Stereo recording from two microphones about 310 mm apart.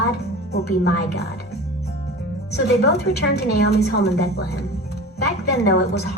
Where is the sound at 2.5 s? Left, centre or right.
Left.